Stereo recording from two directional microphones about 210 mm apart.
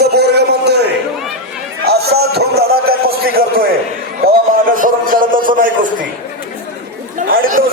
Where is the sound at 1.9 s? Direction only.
50° right (ahead or behind).